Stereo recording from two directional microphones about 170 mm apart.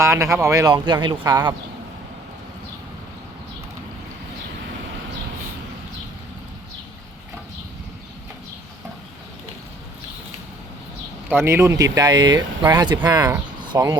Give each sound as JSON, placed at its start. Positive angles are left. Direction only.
{"t": 0.0, "sound": "speech", "side_deg": -15}
{"t": 11.3, "sound": "speech", "side_deg": -15}